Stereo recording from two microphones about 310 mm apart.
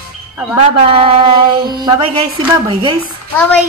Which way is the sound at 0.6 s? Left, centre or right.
Centre.